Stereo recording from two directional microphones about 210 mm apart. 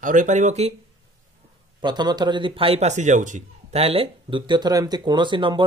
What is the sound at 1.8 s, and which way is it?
A man's voice, 20° right (ahead or behind).